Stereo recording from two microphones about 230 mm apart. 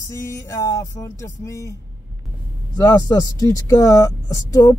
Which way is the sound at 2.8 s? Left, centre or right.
Centre.